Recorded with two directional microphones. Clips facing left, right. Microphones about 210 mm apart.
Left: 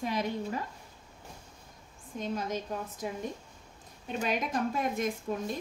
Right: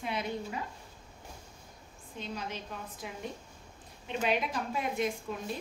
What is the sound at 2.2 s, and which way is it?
A woman's voice, 45° left (ahead or behind).